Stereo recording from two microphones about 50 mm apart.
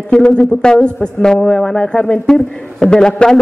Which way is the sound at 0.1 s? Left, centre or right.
Centre.